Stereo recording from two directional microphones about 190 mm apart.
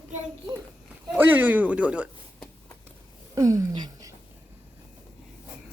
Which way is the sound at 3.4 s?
20° right (ahead or behind).